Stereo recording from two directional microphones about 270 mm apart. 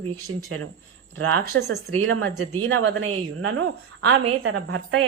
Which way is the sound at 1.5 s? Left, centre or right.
Right.